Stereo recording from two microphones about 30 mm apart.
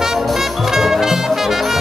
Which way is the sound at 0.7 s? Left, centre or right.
Centre.